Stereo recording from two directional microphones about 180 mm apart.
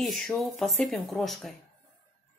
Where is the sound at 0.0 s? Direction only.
Centre (ahead or behind).